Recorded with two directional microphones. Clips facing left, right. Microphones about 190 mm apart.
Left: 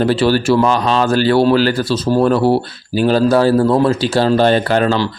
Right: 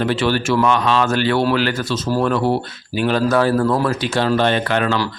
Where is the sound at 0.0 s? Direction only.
35° left (ahead or behind).